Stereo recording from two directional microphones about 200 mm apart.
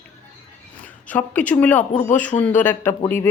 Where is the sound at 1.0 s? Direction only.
5° left (ahead or behind).